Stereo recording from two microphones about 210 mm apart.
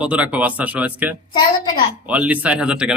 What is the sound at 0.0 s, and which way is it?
A man's voice, 5° right (ahead or behind).